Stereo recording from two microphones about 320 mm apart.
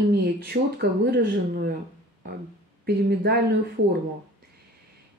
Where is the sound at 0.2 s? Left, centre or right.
Right.